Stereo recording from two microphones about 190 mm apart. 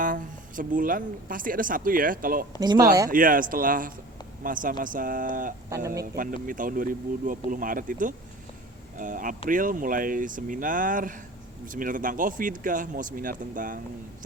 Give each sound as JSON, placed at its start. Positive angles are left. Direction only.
{"t": 0.0, "sound": "speech", "side_deg": -45}
{"t": 2.6, "sound": "speech", "side_deg": -20}
{"t": 3.1, "sound": "speech", "side_deg": -45}
{"t": 5.7, "sound": "speech", "side_deg": -15}
{"t": 6.1, "sound": "speech", "side_deg": -45}